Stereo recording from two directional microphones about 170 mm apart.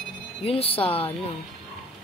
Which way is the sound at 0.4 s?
35° left (ahead or behind).